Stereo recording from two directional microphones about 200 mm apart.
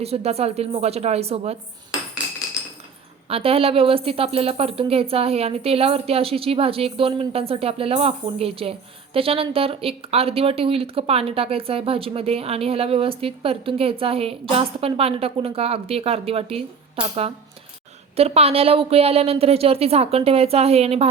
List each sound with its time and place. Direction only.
0.0 s a woman's voice: 30° right (ahead or behind)
3.2 s a woman's voice: 30° right (ahead or behind)